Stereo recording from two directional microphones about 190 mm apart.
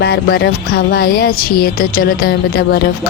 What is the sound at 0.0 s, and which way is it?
Music, 60° left (ahead or behind).